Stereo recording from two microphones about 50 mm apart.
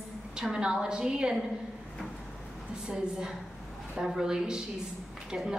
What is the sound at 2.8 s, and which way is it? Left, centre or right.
A woman's voice, centre.